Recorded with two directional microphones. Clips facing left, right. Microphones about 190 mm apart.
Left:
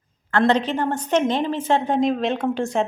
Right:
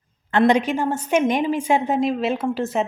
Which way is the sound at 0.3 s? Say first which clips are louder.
Right 2 dB; 15° right (ahead or behind).